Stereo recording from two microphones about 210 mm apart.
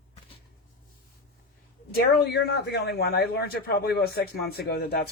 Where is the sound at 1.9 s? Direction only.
50° left (ahead or behind).